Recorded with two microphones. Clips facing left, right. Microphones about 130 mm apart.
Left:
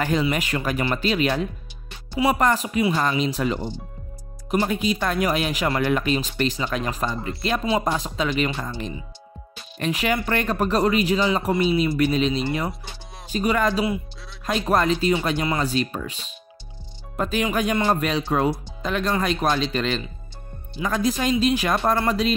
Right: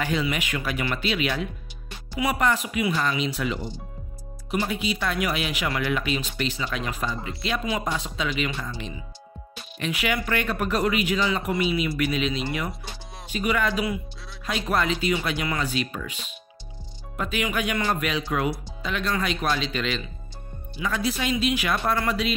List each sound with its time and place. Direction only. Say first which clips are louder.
0.0 s speech: left 4 dB; 40° left (ahead or behind)
2.1 s speech: left 4 dB; 30° left (ahead or behind)
17.2 s speech: left 4 dB; 40° left (ahead or behind)